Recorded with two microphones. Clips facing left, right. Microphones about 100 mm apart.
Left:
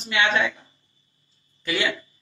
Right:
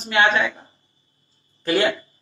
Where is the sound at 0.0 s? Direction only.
40° right (ahead or behind).